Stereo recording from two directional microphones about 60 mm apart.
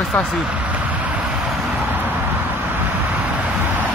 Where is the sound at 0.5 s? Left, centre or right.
Right.